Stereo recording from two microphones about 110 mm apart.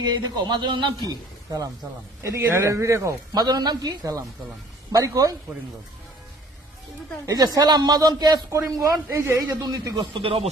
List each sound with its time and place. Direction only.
0.1 s speech: 40° right (ahead or behind)
7.3 s speech: 35° right (ahead or behind)
10.2 s speech: 60° right (ahead or behind)